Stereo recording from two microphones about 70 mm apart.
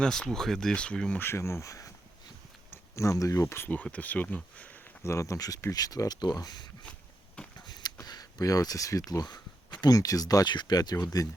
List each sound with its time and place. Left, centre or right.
0.0 s speech: centre
1.2 s speech: left
2.9 s speech: left
3.9 s speech: left
5.0 s speech: left
5.7 s speech: left
7.4 s a sound: centre
7.7 s a sound: left
8.0 s speech: left